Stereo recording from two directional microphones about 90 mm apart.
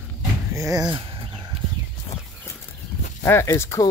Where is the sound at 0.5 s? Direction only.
40° right (ahead or behind).